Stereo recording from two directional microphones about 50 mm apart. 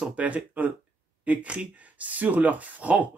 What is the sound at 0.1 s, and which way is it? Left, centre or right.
Speech, right.